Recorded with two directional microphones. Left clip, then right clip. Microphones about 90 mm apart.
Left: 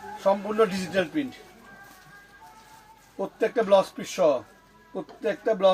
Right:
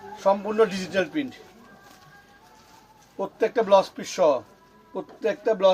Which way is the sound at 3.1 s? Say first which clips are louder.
Right 2 dB; 25° right (ahead or behind).